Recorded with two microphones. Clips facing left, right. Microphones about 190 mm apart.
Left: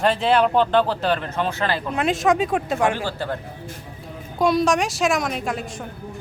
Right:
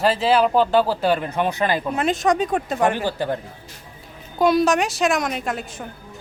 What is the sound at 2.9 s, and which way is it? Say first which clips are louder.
Speech: right 3 dB; 15° right (ahead or behind).